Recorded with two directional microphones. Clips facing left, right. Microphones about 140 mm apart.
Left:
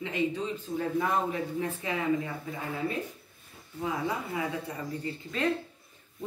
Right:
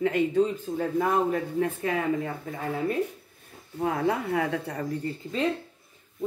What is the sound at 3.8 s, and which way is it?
Speech, 60° right (ahead or behind).